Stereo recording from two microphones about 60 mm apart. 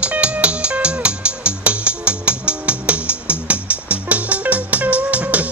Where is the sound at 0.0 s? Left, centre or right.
Right.